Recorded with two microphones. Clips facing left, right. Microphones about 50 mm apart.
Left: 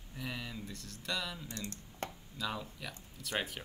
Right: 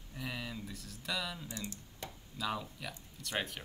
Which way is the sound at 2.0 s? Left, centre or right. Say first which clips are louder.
Left 5 dB; left.